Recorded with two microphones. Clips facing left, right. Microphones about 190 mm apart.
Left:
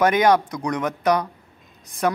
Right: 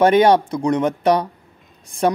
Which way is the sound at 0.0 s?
30° right (ahead or behind).